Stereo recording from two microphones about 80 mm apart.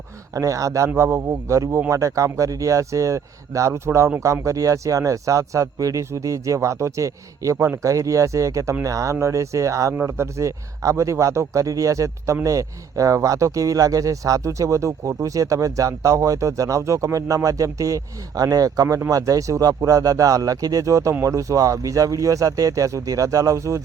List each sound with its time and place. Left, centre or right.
0.3 s speech: right